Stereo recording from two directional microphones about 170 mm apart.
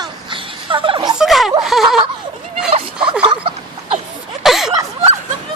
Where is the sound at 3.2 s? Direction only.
30° right (ahead or behind).